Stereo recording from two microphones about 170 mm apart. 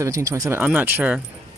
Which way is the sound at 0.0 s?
15° right (ahead or behind).